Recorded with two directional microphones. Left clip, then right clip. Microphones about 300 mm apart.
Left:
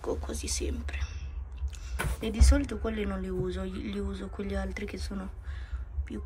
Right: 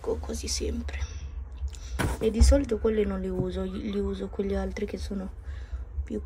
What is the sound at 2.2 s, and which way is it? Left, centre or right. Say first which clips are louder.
Speech: right 7 dB; centre.